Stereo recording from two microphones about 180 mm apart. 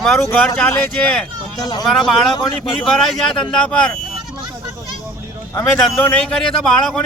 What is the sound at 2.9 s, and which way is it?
Speech, centre (ahead or behind).